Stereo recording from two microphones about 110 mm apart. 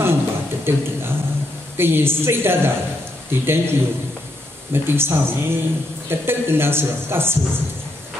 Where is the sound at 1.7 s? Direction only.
20° right (ahead or behind).